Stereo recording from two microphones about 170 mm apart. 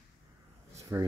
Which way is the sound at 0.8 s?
20° right (ahead or behind).